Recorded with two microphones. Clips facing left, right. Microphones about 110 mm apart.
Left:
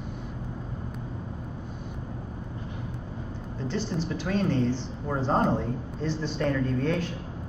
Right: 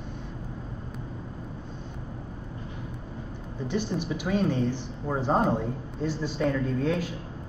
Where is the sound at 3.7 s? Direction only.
15° right (ahead or behind).